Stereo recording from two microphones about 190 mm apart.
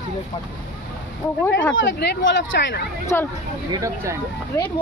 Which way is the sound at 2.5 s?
65° left (ahead or behind).